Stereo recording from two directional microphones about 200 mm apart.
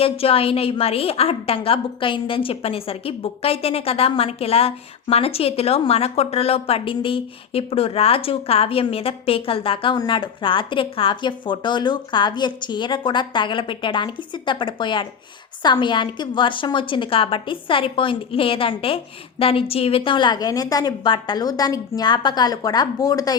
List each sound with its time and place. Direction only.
0.0 s a woman's voice: 30° left (ahead or behind)